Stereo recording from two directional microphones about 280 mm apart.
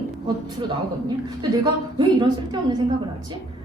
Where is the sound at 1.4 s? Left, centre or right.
Centre.